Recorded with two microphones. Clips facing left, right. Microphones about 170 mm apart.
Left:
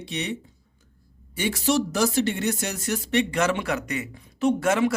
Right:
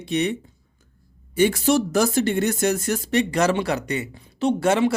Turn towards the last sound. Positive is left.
turn(degrees=-30)  # may be behind; listen again after turning